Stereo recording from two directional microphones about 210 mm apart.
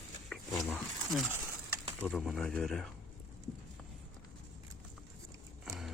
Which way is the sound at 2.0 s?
Centre (ahead or behind).